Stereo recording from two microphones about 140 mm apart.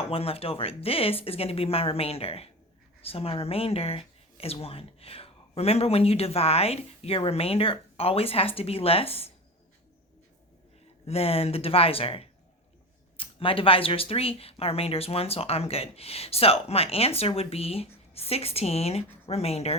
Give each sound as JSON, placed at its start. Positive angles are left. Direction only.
{"t": 0.1, "sound": "speech", "side_deg": 45}
{"t": 11.0, "sound": "speech", "side_deg": 45}